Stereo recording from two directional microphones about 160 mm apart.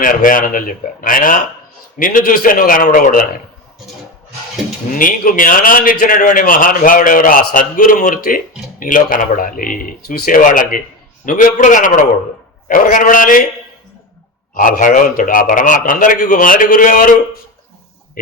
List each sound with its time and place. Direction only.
0.0 s a man's voice: 55° left (ahead or behind)
4.9 s a man's voice: 60° left (ahead or behind)
14.5 s a man's voice: 55° left (ahead or behind)